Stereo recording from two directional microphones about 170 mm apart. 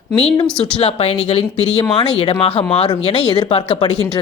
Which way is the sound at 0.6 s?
35° left (ahead or behind).